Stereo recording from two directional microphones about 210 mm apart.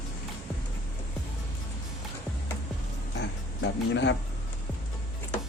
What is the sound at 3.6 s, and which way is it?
Speech, 55° left (ahead or behind).